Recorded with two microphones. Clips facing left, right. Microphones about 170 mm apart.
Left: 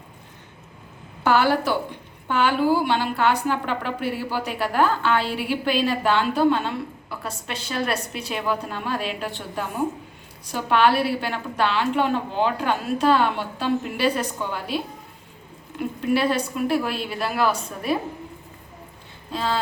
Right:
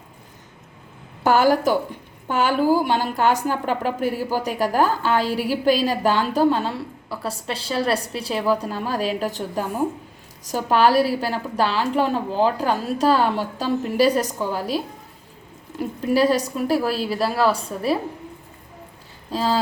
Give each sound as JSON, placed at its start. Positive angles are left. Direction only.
{"t": 1.2, "sound": "a woman's voice", "side_deg": -40}
{"t": 15.8, "sound": "a woman's voice", "side_deg": -35}
{"t": 19.3, "sound": "speech", "side_deg": -35}